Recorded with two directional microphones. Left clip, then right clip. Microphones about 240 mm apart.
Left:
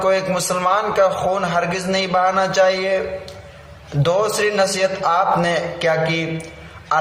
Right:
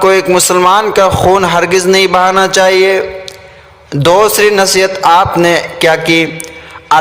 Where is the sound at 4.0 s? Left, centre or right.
Right.